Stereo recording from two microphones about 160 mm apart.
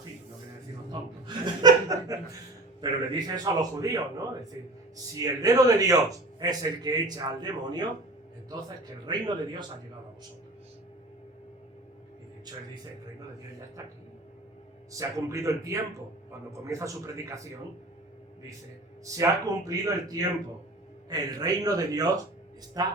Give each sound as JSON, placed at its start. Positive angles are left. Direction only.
{"t": 0.9, "sound": "chuckle", "side_deg": -25}
{"t": 2.8, "sound": "a man's voice", "side_deg": -25}
{"t": 9.0, "sound": "a man's voice", "side_deg": -30}
{"t": 14.9, "sound": "a man's voice", "side_deg": -20}
{"t": 19.1, "sound": "a man's voice", "side_deg": -20}